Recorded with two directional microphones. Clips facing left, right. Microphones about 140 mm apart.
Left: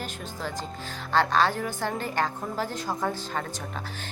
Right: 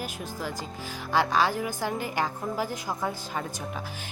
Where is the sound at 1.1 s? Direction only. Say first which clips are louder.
Left 1 dB; 10° right (ahead or behind).